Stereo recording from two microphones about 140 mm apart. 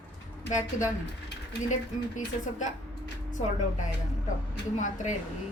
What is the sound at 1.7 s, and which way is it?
A woman's voice, 60° left (ahead or behind).